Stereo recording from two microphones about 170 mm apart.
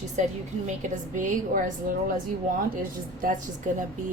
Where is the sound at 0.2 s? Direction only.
45° right (ahead or behind).